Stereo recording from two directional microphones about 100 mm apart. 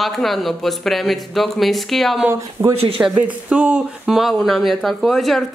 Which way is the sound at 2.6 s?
20° right (ahead or behind).